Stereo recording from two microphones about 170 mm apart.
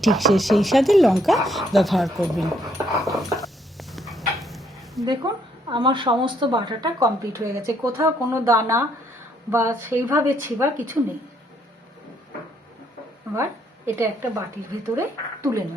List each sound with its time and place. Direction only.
0.0 s speech: centre (ahead or behind)
5.7 s a woman's voice: 30° right (ahead or behind)
13.3 s a woman's voice: 15° right (ahead or behind)